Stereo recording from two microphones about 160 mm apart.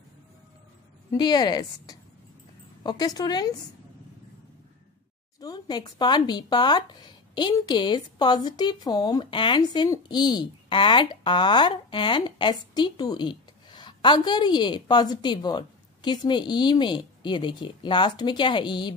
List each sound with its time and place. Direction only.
1.1 s speech: 25° left (ahead or behind)
5.4 s speech: 25° left (ahead or behind)